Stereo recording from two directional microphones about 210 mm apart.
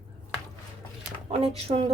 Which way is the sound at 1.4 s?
30° right (ahead or behind).